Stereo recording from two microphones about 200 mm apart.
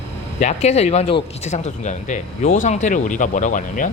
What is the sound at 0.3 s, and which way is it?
A man's voice, 35° left (ahead or behind).